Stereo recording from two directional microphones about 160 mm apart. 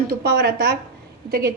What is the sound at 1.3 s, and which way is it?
Speech, 80° right.